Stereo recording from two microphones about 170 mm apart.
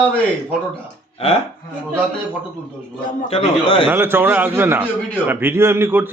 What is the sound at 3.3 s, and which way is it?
Speech, 35° left (ahead or behind).